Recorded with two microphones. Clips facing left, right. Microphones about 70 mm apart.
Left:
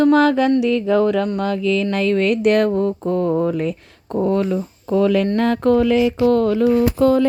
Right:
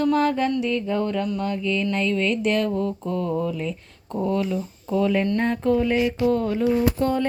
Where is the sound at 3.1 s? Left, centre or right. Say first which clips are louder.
Left 7 dB; left.